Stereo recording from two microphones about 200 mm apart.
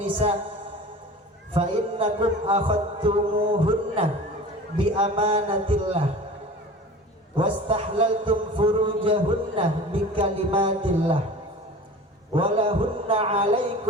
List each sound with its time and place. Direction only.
0.0 s speech: 30° right (ahead or behind)
1.5 s a man's voice: 30° right (ahead or behind)
7.3 s a man's voice: 25° right (ahead or behind)
12.3 s a man's voice: 25° right (ahead or behind)